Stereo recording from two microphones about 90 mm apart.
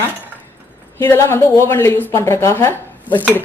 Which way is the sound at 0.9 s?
30° left (ahead or behind).